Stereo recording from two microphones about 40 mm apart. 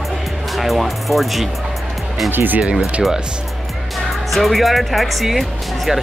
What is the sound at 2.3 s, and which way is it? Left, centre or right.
Speech, right.